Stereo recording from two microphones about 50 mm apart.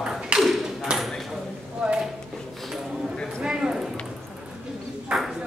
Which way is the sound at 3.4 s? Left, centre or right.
Centre.